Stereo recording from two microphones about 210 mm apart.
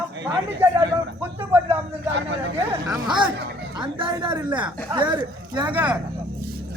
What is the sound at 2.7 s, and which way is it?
Speech, 15° right (ahead or behind).